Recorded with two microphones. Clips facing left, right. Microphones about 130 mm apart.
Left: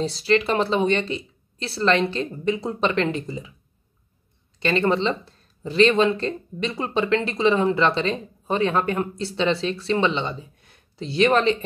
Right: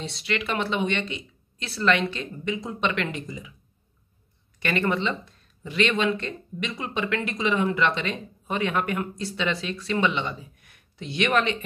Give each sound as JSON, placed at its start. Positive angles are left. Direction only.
{"t": 0.0, "sound": "speech", "side_deg": 35}
{"t": 4.6, "sound": "speech", "side_deg": 30}